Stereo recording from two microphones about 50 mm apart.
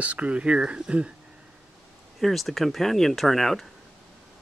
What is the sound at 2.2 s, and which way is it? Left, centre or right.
Speech, centre.